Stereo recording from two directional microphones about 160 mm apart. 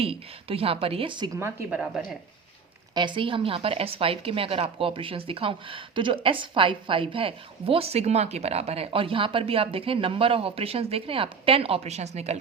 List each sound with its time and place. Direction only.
0.0 s a woman's voice: 35° right (ahead or behind)
1.7 s speech: 5° right (ahead or behind)
2.9 s a woman's voice: 30° right (ahead or behind)